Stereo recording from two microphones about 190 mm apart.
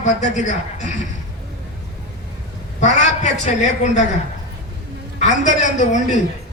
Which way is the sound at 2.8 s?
40° left (ahead or behind).